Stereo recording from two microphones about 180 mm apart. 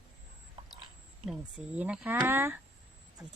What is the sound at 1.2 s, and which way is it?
Speech, 5° right (ahead or behind).